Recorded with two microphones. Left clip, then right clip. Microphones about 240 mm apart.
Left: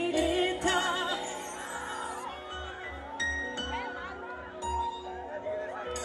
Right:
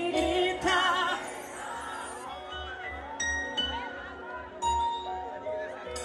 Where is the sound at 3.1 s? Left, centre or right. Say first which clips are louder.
Right 2 dB; centre.